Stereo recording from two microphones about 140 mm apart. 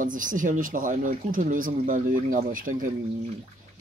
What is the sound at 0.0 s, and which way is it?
Speech, 70° right (ahead or behind).